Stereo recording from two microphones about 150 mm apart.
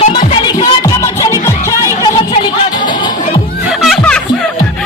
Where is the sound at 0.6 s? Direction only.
20° left (ahead or behind).